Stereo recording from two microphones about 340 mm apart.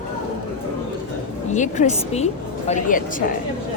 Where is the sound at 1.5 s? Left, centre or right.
Left.